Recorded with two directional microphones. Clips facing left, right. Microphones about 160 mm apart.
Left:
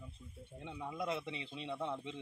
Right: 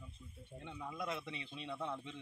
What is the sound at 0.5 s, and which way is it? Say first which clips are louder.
Speech: left 3 dB; 15° left (ahead or behind).